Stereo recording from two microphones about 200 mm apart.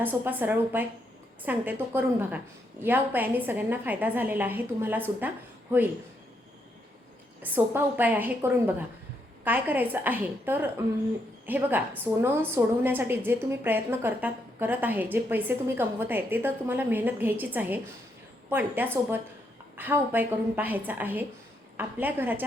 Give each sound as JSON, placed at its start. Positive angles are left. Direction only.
{"t": 0.0, "sound": "a woman's voice", "side_deg": -10}
{"t": 7.4, "sound": "a woman's voice", "side_deg": -10}